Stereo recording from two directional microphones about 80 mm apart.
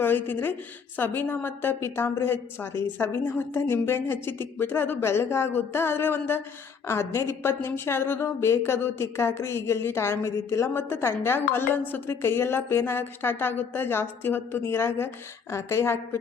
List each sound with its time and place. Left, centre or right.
0.0 s a woman's voice: left